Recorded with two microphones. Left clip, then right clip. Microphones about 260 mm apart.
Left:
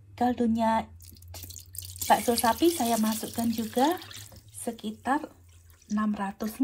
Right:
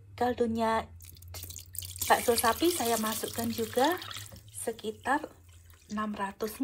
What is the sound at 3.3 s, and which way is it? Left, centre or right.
Speech, centre.